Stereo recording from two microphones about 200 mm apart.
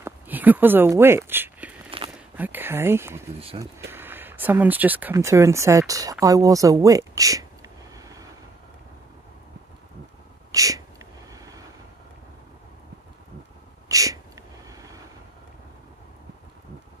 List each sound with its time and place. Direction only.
0.0 s speech: 10° right (ahead or behind)
7.9 s vehicle: 15° right (ahead or behind)
10.5 s a sound: 15° right (ahead or behind)
11.3 s vehicle: 15° right (ahead or behind)
13.8 s a sound: 15° right (ahead or behind)
14.7 s vehicle: 15° right (ahead or behind)